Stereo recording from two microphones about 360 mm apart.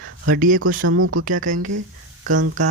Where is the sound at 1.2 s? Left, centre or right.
Right.